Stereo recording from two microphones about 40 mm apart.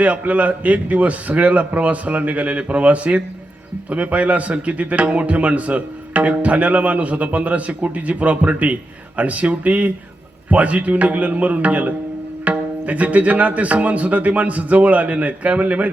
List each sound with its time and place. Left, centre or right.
0.0 s a man's voice: right